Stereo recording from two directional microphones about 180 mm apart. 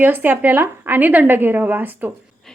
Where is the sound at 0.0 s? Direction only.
10° right (ahead or behind).